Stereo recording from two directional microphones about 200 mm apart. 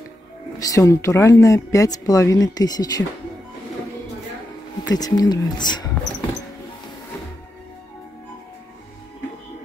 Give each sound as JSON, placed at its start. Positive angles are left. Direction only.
{"t": 0.6, "sound": "speech", "side_deg": 15}
{"t": 4.8, "sound": "speech", "side_deg": 20}